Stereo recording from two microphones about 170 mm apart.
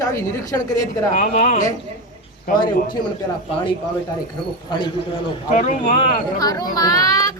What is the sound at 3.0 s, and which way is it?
Speech, 30° left (ahead or behind).